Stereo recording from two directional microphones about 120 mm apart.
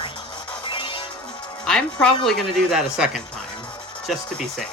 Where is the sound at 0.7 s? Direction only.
45° left (ahead or behind).